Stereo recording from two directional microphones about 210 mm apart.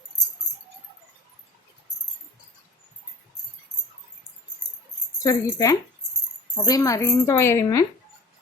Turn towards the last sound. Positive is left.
turn(degrees=15)  # may be behind; listen again after turning